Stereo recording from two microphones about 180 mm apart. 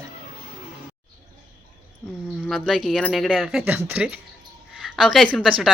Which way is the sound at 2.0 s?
10° left (ahead or behind).